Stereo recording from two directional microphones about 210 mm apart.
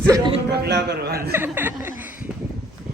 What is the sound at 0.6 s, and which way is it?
Speech, 50° right (ahead or behind).